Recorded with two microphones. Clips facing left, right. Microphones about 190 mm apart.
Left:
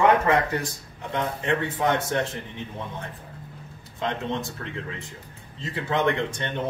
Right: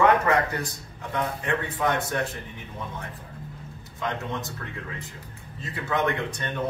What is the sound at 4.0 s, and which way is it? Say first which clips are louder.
A man's voice: left 3 dB; 25° left (ahead or behind).